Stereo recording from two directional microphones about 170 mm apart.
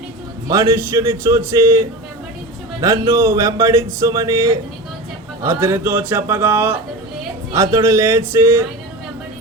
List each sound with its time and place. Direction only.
0.4 s speech: 15° right (ahead or behind)
2.8 s speech: 15° right (ahead or behind)